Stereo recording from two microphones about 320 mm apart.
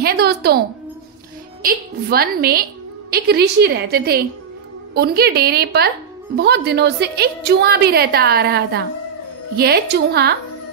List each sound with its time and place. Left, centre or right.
0.0 s a woman's voice: right
1.6 s a woman's voice: right